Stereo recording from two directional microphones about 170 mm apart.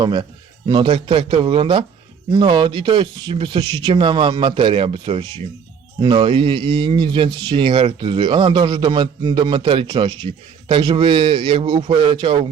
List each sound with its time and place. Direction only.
0.0 s a man's voice: 25° right (ahead or behind)